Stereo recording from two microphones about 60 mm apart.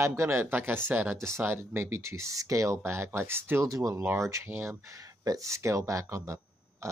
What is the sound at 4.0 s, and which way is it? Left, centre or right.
Speech, right.